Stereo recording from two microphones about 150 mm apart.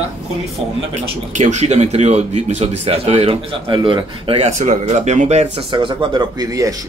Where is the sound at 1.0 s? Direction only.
50° right (ahead or behind).